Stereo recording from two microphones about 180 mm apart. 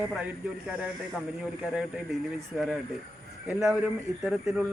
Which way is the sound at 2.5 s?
5° right (ahead or behind).